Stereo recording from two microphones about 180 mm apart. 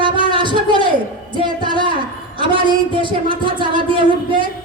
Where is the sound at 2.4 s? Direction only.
25° right (ahead or behind).